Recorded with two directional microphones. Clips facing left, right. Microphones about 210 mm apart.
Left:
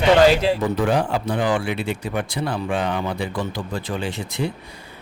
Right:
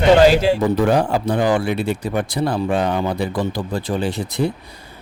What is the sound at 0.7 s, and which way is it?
A man's voice, 40° right (ahead or behind).